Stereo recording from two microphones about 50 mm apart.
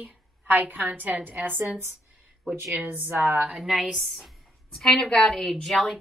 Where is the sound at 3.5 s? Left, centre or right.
Centre.